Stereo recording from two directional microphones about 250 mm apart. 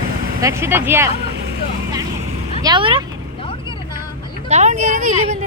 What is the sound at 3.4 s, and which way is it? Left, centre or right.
Vehicle, left.